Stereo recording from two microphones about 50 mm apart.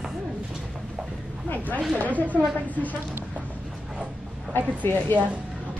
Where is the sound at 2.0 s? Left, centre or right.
Left.